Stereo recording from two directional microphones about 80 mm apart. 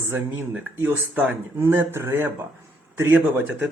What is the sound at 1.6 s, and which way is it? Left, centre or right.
Speech, right.